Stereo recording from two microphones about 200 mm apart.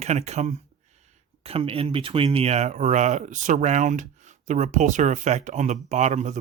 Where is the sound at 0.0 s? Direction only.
35° right (ahead or behind).